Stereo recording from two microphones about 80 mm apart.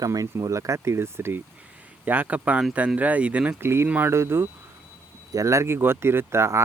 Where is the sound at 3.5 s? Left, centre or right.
Right.